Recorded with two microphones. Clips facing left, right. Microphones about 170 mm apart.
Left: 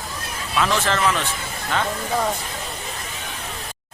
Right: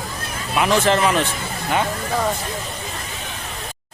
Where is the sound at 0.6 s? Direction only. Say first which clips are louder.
Right 4 dB; 15° right (ahead or behind).